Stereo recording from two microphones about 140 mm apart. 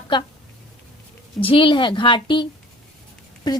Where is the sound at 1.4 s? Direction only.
40° left (ahead or behind).